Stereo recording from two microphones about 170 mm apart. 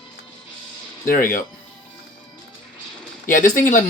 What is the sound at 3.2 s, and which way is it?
Speech, 50° left (ahead or behind).